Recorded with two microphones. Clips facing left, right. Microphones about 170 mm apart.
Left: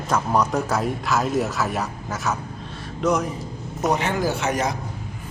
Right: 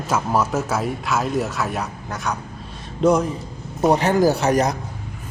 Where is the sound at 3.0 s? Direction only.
30° right (ahead or behind).